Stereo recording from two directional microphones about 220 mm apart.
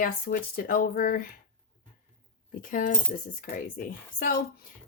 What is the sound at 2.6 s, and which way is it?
Speech, 35° left (ahead or behind).